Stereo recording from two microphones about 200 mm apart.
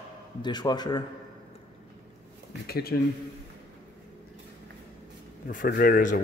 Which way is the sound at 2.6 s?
50° left (ahead or behind).